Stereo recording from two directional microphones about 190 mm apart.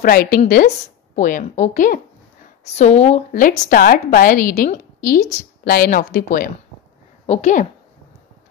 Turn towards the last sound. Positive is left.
turn(degrees=35)  # may be behind; listen again after turning